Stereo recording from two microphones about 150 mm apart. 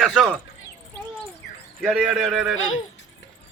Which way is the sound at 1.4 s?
90° left.